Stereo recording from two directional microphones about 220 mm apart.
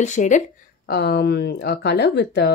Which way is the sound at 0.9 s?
45° left (ahead or behind).